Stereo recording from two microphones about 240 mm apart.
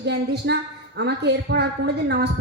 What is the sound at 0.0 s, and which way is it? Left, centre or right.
Speech, right.